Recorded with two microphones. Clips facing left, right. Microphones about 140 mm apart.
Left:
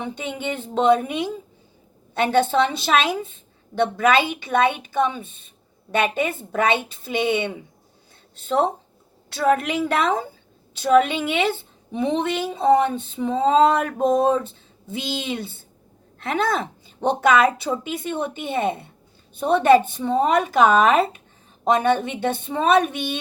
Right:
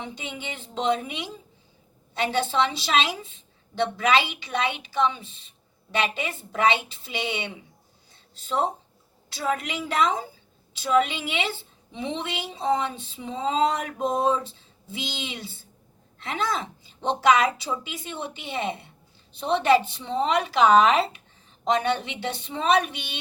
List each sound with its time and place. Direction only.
0.0 s a woman's voice: 55° left (ahead or behind)